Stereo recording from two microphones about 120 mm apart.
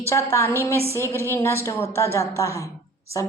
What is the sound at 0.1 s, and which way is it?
Speech, 25° left (ahead or behind).